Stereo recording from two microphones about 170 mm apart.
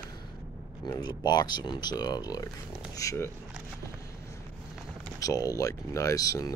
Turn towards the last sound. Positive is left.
turn(degrees=20)  # may be behind; listen again after turning